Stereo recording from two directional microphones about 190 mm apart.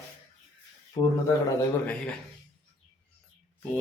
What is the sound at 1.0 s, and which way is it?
Speech, 20° left (ahead or behind).